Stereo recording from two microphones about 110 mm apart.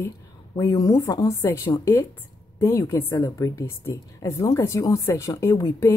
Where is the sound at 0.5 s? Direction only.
30° left (ahead or behind).